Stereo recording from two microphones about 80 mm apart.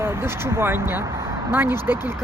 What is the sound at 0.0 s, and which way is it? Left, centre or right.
Speech, right.